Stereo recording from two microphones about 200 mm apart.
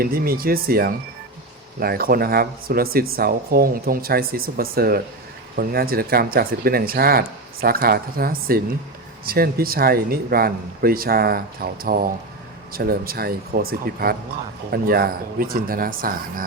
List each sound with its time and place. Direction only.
0.0 s speech: 45° right (ahead or behind)